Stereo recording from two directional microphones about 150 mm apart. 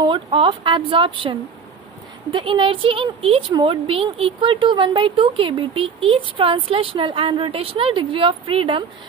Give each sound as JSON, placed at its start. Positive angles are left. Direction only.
{"t": 0.0, "sound": "speech", "side_deg": -35}